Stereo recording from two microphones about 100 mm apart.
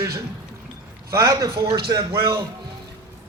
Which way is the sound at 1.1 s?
35° right (ahead or behind).